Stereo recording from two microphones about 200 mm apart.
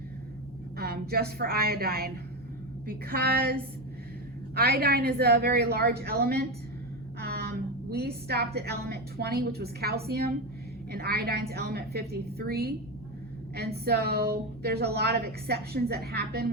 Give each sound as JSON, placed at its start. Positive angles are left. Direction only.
{"t": 0.8, "sound": "a woman's voice", "side_deg": -50}
{"t": 13.8, "sound": "a woman's voice", "side_deg": -50}